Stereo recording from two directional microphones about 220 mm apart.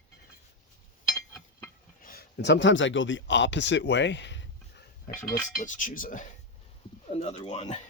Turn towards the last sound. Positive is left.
turn(degrees=30)  # may be behind; listen again after turning